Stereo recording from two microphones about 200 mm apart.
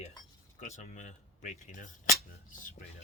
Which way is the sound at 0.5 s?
35° left (ahead or behind).